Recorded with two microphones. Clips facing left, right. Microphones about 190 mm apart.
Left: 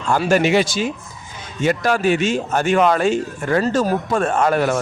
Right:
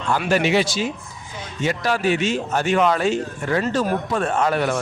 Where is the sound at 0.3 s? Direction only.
45° left (ahead or behind).